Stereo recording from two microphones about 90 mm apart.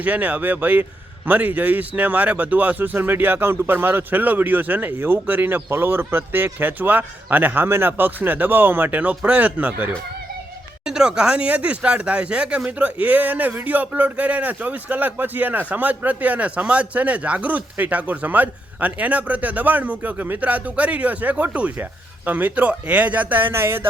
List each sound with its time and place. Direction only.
0.0 s speech: 20° right (ahead or behind)
10.8 s speech: 5° right (ahead or behind); by 23.8 s 30° right (ahead or behind)